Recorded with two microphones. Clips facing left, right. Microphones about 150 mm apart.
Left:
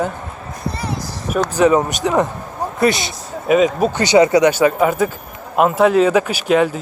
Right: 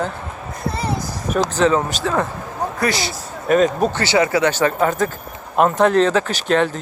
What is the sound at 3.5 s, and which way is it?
Speech, 5° left (ahead or behind).